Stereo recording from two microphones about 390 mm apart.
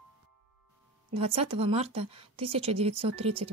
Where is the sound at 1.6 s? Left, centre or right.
Centre.